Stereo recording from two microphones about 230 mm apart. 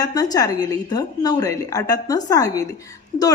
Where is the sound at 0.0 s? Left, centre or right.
Centre.